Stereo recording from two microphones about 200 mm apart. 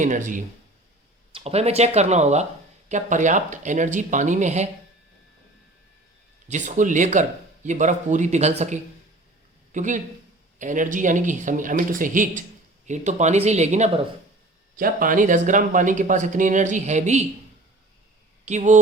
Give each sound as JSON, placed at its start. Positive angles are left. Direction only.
{"t": 0.0, "sound": "speech", "side_deg": -40}
{"t": 6.5, "sound": "speech", "side_deg": -40}
{"t": 18.4, "sound": "speech", "side_deg": -35}